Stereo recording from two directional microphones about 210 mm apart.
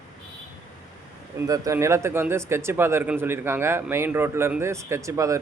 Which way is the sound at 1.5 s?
15° right (ahead or behind).